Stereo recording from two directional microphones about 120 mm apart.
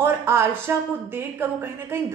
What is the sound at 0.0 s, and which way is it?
Speech, 20° right (ahead or behind).